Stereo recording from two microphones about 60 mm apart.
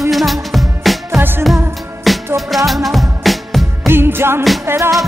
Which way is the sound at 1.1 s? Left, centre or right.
Right.